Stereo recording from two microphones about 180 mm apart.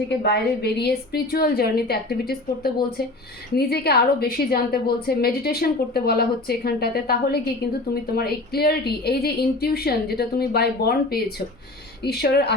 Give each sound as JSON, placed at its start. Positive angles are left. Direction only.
{"t": 0.1, "sound": "a woman's voice", "side_deg": 65}